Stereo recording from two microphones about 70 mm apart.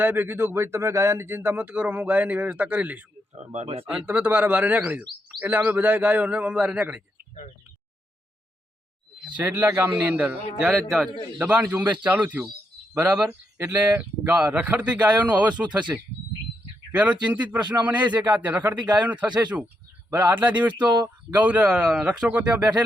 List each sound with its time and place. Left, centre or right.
0.0 s speech: right
9.3 s speech: right
10.0 s speech: right
10.8 s a man's voice: centre
11.0 s speech: centre
16.9 s speech: centre
19.6 s a sound: right
20.3 s speech: right
21.7 s speech: centre
22.3 s speech: right